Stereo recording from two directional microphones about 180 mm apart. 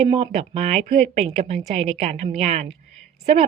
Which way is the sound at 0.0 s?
35° right (ahead or behind).